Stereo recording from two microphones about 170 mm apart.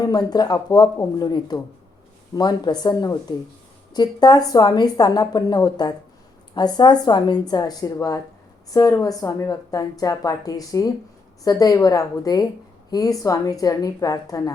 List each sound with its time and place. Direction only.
0.0 s speech: 25° left (ahead or behind)